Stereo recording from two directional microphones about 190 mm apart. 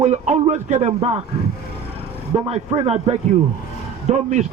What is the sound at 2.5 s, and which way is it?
A man's voice, 35° right (ahead or behind).